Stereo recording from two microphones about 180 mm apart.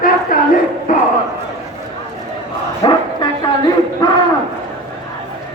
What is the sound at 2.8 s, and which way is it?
Bow-wow, 25° left (ahead or behind).